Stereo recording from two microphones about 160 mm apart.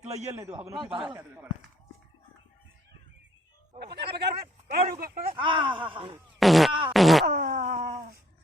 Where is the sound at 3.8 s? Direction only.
90° right.